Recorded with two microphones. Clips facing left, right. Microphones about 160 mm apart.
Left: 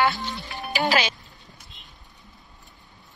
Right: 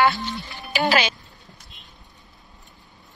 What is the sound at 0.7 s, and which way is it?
Speech, 75° right (ahead or behind).